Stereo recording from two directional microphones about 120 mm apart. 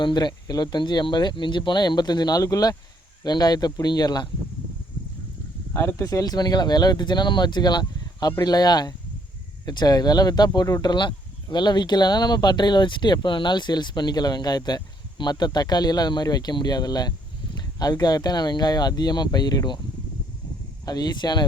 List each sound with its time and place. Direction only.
0.0 s speech: 35° left (ahead or behind)
5.7 s speech: 20° left (ahead or behind); by 19.8 s 35° left (ahead or behind)
20.8 s speech: 35° left (ahead or behind)